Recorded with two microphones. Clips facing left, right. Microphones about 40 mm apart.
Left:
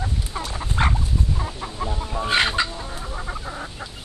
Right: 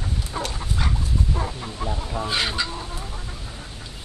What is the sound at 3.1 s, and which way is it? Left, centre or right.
Chicken, left.